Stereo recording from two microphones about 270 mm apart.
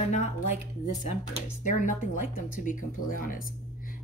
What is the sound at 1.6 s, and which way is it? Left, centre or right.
A woman's voice, left.